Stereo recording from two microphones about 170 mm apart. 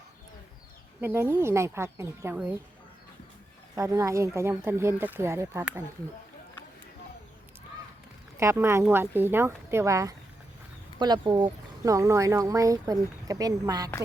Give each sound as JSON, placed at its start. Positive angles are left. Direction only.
{"t": 1.0, "sound": "speech", "side_deg": -15}
{"t": 3.8, "sound": "speech", "side_deg": -20}
{"t": 8.4, "sound": "speech", "side_deg": -15}